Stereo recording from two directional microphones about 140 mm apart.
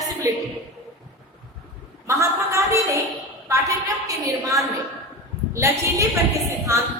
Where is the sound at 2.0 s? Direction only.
20° right (ahead or behind).